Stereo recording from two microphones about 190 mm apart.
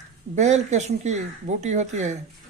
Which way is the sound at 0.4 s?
35° right (ahead or behind).